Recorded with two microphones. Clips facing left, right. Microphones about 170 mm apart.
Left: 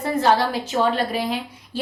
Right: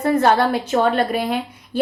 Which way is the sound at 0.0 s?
60° right (ahead or behind).